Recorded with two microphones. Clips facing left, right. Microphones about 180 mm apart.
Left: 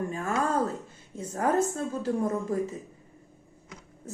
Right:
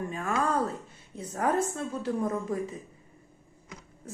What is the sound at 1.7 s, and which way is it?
Speech, 40° left (ahead or behind).